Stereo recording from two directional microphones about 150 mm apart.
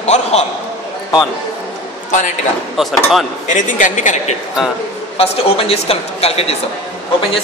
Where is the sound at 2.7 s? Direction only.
Centre (ahead or behind).